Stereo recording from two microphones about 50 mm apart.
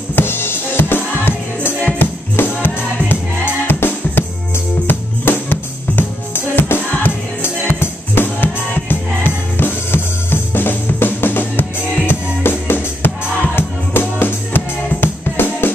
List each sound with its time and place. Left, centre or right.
0.1 s music: left